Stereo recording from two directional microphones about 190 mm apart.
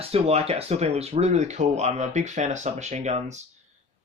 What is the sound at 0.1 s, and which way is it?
Speech, 30° right (ahead or behind).